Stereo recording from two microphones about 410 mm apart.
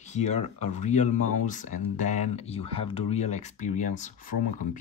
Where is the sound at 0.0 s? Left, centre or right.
Centre.